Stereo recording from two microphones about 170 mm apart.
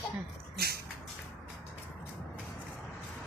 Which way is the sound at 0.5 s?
65° right (ahead or behind).